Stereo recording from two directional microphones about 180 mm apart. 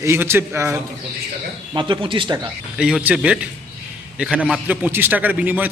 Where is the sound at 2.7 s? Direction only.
5° right (ahead or behind).